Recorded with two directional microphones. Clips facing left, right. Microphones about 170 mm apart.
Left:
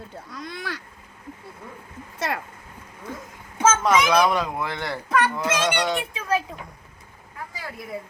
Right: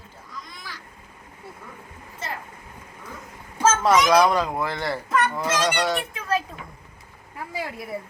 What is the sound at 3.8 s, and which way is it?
Speech, centre (ahead or behind).